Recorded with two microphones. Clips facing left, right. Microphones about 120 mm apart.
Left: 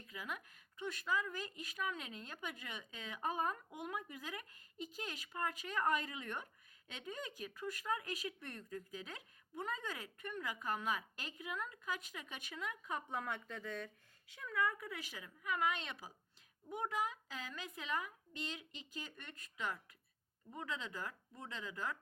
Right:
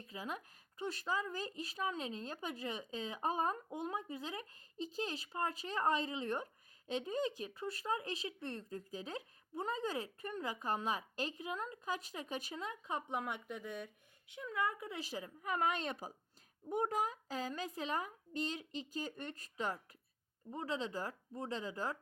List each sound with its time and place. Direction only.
0.0 s speech: 30° right (ahead or behind)